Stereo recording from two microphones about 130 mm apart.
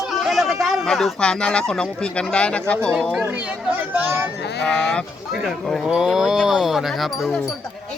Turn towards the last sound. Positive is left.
turn(degrees=0)  # may be behind; listen again after turning